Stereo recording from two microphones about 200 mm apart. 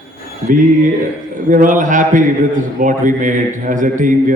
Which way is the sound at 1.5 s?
40° right (ahead or behind).